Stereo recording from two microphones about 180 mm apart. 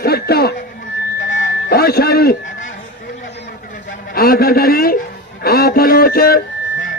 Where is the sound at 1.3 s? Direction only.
75° left (ahead or behind); by 2.7 s 60° left (ahead or behind).